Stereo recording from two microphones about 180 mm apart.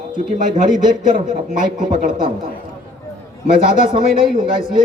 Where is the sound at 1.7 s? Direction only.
45° right (ahead or behind).